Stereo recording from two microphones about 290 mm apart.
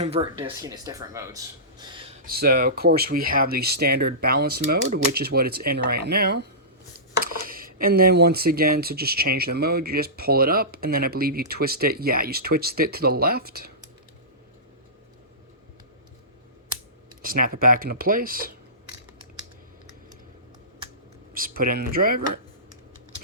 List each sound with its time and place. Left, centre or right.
0.0 s speech: centre
2.2 s speech: right
17.4 s speech: right
21.3 s speech: right